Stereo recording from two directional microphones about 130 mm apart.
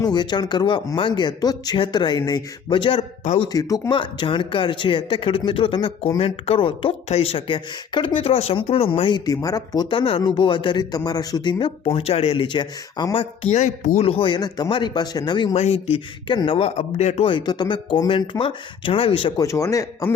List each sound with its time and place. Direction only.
0.0 s speech: 35° left (ahead or behind)
9.9 s speech: 40° left (ahead or behind)
11.9 s speech: 50° left (ahead or behind)
13.4 s speech: 65° left (ahead or behind)
14.1 s speech: 40° left (ahead or behind)
15.5 s speech: 55° left (ahead or behind)
17.3 s speech: 35° left (ahead or behind)
19.4 s speech: 25° left (ahead or behind)